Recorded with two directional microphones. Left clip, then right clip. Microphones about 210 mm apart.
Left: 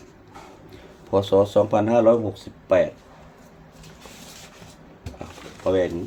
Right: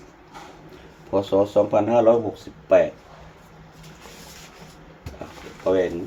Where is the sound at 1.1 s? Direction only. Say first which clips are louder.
Left 1 dB; 55° left (ahead or behind).